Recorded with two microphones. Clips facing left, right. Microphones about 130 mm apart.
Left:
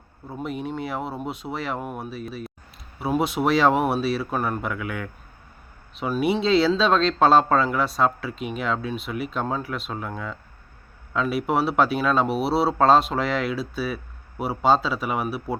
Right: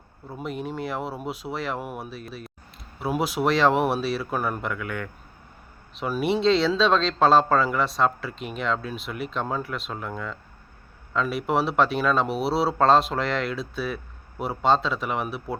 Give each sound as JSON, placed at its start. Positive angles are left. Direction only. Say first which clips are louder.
{"t": 0.3, "sound": "speech", "louder": "left 2 dB", "side_deg": 0}